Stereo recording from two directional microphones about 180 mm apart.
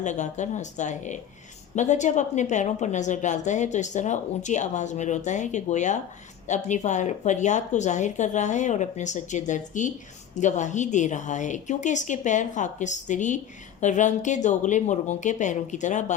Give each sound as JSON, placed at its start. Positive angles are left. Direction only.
{"t": 0.0, "sound": "a woman's voice", "side_deg": 40}